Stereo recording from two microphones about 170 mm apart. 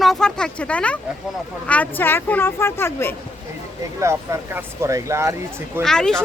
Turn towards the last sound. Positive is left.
turn(degrees=5)  # may be behind; listen again after turning